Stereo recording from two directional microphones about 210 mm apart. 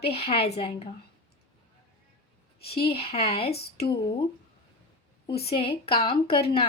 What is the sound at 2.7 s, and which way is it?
Speech, 25° left (ahead or behind).